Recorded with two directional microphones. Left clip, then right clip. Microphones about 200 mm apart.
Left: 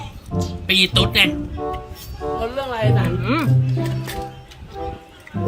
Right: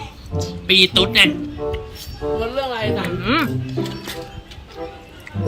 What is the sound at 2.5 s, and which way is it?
Speech, centre (ahead or behind).